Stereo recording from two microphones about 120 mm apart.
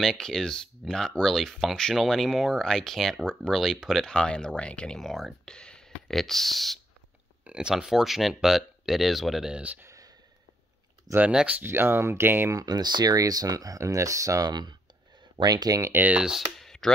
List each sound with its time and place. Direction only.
0.0 s speech: 5° left (ahead or behind); by 9.8 s 10° right (ahead or behind)
9.8 s a sound: 30° right (ahead or behind)
11.1 s speech: 10° right (ahead or behind)
12.5 s speech: 35° right (ahead or behind)
15.9 s speech: 15° right (ahead or behind)
16.5 s a sound: 5° left (ahead or behind)